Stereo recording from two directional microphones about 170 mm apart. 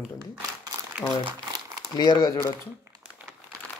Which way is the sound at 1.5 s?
20° right (ahead or behind).